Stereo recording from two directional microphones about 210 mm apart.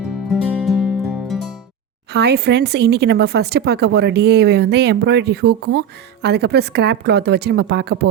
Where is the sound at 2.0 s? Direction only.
50° right (ahead or behind).